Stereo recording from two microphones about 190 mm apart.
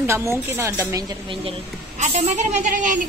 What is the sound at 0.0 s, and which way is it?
A woman's voice, 15° right (ahead or behind).